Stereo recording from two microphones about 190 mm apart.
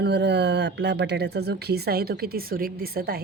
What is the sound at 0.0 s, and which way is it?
A woman's voice, 65° right (ahead or behind).